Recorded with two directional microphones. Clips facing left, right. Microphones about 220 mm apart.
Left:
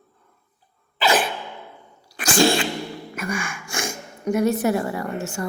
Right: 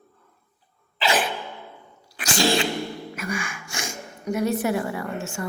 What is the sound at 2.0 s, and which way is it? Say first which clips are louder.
Sneeze: left 6 dB; 45° left (ahead or behind).